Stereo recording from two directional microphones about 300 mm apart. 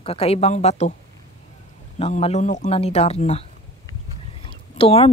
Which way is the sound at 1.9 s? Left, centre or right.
Centre.